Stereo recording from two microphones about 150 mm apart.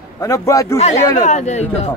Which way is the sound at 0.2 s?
20° left (ahead or behind).